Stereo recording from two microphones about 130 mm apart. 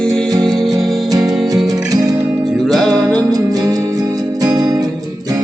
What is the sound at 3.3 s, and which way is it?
Music, 30° right (ahead or behind).